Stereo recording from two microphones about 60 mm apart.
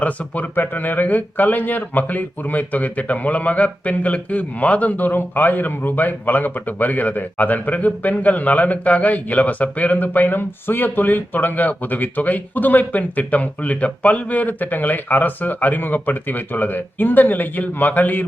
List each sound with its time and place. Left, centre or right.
0.0 s speech: left